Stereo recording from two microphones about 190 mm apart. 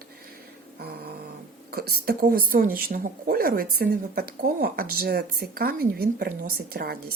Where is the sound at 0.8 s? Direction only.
55° right (ahead or behind).